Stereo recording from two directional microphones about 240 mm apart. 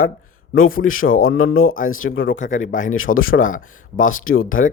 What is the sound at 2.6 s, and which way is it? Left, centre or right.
Speech, left.